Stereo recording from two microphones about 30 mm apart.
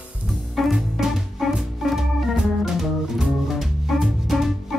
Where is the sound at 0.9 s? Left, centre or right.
Centre.